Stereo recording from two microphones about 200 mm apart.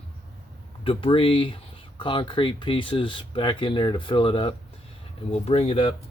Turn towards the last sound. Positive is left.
turn(degrees=30)  # may be behind; listen again after turning